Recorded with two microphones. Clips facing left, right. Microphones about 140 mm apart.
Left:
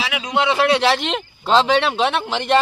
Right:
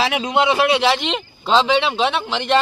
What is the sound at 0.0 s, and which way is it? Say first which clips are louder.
Speech: right 6 dB; 35° right (ahead or behind).